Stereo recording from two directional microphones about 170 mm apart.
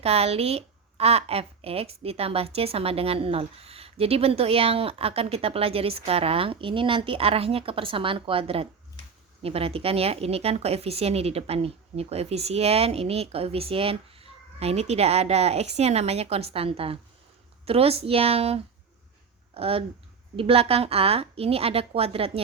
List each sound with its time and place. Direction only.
0.0 s a woman's voice: 35° right (ahead or behind)